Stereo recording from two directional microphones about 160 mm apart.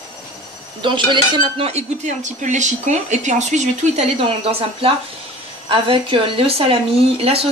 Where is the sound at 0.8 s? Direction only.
30° right (ahead or behind).